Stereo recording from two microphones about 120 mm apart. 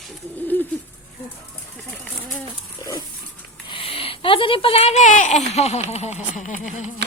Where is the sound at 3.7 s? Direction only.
50° left (ahead or behind); by 6.9 s 90° left.